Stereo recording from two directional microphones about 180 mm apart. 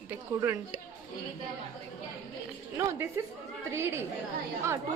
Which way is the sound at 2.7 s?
15° right (ahead or behind).